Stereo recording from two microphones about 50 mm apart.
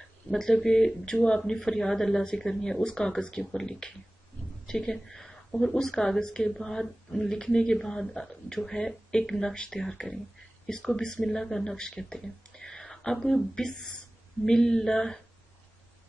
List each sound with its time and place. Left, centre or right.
0.3 s a woman's voice: centre